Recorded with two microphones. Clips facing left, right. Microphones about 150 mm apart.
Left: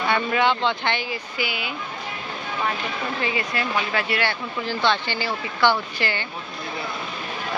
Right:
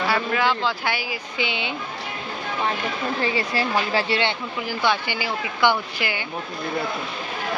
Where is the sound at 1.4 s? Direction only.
25° right (ahead or behind).